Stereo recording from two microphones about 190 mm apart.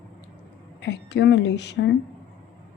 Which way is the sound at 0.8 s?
65° left (ahead or behind).